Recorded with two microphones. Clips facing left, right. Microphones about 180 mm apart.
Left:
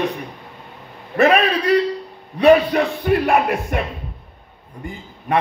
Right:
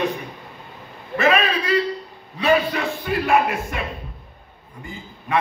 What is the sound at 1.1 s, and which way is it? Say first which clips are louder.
A man's voice: left 4 dB; 65° left (ahead or behind).